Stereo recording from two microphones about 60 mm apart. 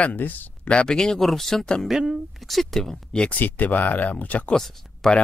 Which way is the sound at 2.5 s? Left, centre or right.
Centre.